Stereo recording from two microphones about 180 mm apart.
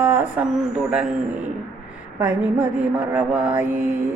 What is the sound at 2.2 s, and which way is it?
Mantra, 10° right (ahead or behind).